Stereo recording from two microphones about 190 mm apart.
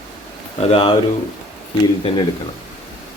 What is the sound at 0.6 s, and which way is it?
Speech, 30° left (ahead or behind).